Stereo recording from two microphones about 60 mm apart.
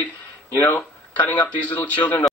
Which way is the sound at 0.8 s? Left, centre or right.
Left.